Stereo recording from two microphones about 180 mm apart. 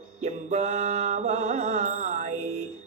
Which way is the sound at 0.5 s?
40° right (ahead or behind).